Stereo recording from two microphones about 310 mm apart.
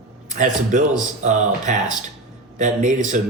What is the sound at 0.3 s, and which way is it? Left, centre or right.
Speech, right.